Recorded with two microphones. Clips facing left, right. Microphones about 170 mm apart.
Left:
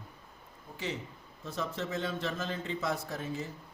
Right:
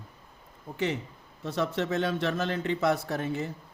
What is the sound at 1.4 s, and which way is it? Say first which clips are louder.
A man's voice: right 7 dB; 75° right (ahead or behind).